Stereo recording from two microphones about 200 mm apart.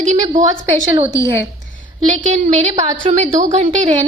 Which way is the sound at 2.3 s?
35° right (ahead or behind).